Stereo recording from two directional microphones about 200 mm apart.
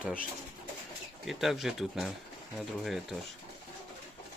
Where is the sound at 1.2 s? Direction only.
Centre (ahead or behind).